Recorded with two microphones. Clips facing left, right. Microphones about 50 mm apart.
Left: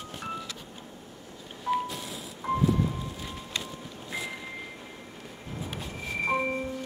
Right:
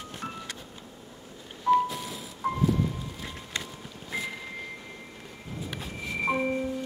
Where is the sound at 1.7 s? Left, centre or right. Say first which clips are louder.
Right 6 dB; centre.